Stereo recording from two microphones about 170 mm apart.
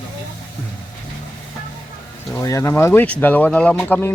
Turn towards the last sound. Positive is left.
turn(degrees=15)  # may be behind; listen again after turning